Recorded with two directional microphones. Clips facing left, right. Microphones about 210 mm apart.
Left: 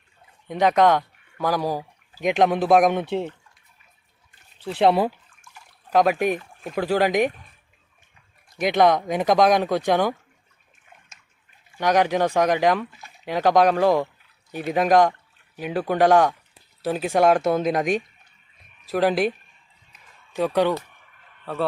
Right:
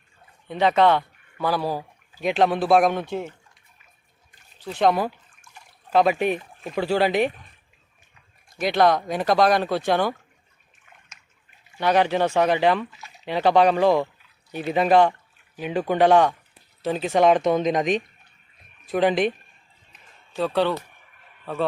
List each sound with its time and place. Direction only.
0.4 s speech: 15° left (ahead or behind)
4.6 s speech: 30° left (ahead or behind)
5.9 s speech: 10° left (ahead or behind)
8.5 s speech: 15° left (ahead or behind)
11.8 s speech: 10° left (ahead or behind)
12.9 s speech: 50° left (ahead or behind)
13.2 s speech: 10° left (ahead or behind)
20.3 s speech: 15° left (ahead or behind)